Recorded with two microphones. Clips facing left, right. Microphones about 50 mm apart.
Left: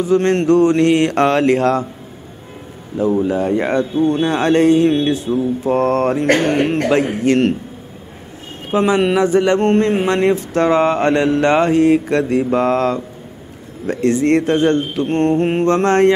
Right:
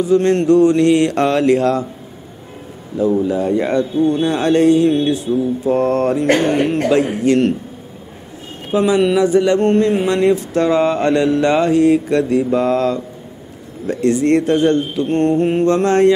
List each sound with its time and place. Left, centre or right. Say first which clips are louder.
0.0 s speech: right 1 dB; left
3.0 s speech: even; left
8.7 s speech: right 1 dB; left